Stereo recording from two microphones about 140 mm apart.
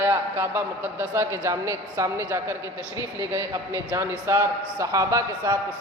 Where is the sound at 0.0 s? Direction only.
15° right (ahead or behind).